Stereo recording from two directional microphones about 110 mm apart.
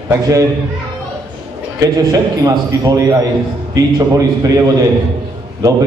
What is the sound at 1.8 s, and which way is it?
A man's voice, 35° right (ahead or behind).